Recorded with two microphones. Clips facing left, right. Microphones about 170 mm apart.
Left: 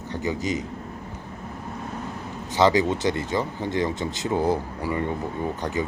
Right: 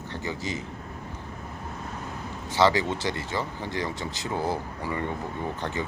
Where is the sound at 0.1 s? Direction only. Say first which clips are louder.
Left 6 dB; 20° left (ahead or behind).